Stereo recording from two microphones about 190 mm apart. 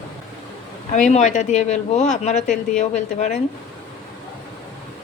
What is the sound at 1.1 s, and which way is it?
Speech, 40° left (ahead or behind).